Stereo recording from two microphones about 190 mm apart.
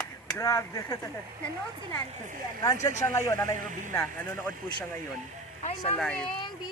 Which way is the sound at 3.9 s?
15° left (ahead or behind).